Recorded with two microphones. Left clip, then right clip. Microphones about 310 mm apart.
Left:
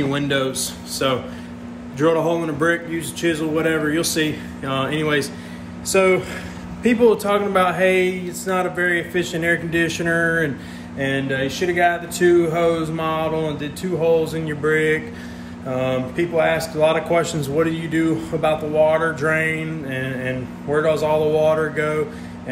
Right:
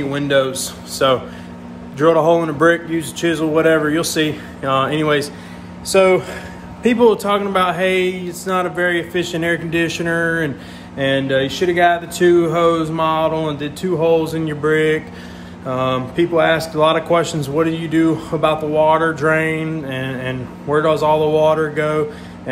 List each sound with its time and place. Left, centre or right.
0.1 s a man's voice: centre